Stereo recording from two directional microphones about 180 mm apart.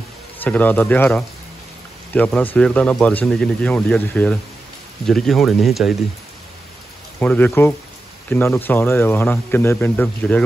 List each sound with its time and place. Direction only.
0.4 s speech: 10° left (ahead or behind)
7.2 s speech: 10° left (ahead or behind)